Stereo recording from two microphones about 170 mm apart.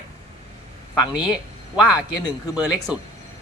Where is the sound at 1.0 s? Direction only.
5° right (ahead or behind).